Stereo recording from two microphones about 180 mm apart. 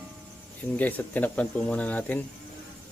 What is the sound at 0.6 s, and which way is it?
Speech, 10° left (ahead or behind).